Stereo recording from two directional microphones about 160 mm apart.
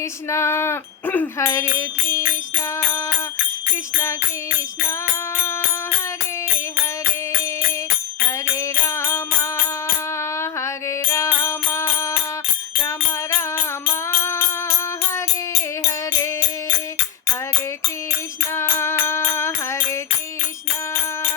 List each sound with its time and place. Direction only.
0.3 s a sound: 15° left (ahead or behind)
8.8 s music: 15° left (ahead or behind)
13.3 s music: 15° left (ahead or behind)
18.5 s music: 15° left (ahead or behind)